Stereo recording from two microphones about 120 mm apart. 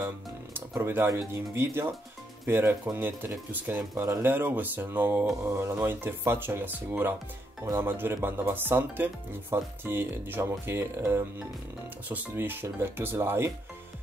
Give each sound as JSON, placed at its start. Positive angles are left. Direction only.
{"t": 0.6, "sound": "speech", "side_deg": -20}